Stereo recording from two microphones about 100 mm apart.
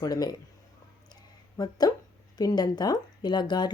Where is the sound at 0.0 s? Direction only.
40° left (ahead or behind).